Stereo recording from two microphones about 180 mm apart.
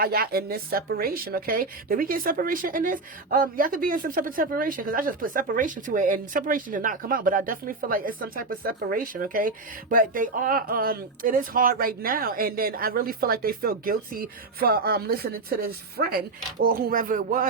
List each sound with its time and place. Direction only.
0.0 s a woman's voice: 55° right (ahead or behind)